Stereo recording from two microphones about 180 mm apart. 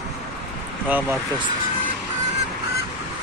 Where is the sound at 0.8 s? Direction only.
10° right (ahead or behind).